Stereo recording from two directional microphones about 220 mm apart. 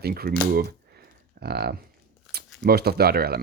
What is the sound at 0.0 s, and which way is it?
Speech, 45° right (ahead or behind).